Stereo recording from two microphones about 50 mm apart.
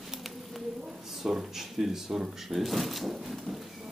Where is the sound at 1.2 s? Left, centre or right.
Centre.